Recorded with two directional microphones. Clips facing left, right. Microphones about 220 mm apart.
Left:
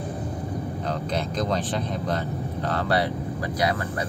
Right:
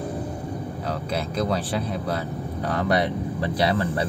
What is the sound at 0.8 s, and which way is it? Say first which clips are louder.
Speech: right 1 dB; 5° right (ahead or behind).